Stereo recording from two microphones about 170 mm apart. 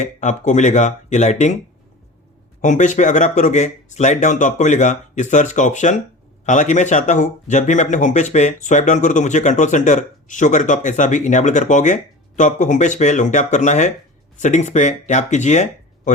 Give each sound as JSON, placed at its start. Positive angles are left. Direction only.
{"t": 0.0, "sound": "speech", "side_deg": 45}
{"t": 2.6, "sound": "speech", "side_deg": 45}